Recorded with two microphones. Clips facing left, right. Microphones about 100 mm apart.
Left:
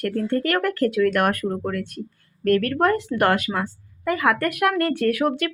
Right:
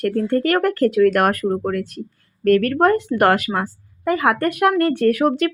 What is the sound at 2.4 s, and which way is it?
Speech, 45° right (ahead or behind).